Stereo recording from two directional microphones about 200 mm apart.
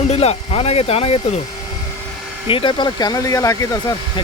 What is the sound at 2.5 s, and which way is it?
Speech, 25° left (ahead or behind).